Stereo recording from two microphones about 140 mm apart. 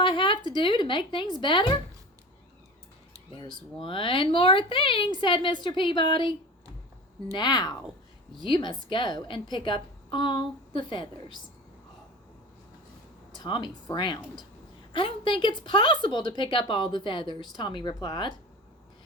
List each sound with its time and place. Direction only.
0.0 s speech: 35° left (ahead or behind)
3.8 s a woman's voice: 35° left (ahead or behind)
7.3 s a woman's voice: 30° left (ahead or behind)
13.3 s a woman's voice: 35° left (ahead or behind)